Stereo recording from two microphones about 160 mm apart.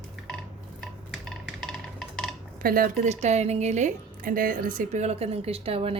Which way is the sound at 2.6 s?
65° right (ahead or behind).